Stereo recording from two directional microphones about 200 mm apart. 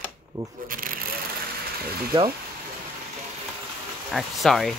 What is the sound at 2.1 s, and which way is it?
Speech, 25° right (ahead or behind).